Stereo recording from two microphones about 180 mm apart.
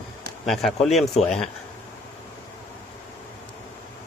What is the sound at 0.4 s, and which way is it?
Speech, centre (ahead or behind).